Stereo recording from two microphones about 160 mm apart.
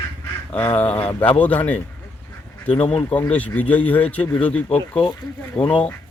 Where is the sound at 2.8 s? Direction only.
40° left (ahead or behind).